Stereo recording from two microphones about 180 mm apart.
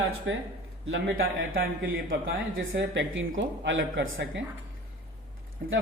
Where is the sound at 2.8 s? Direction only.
90° right.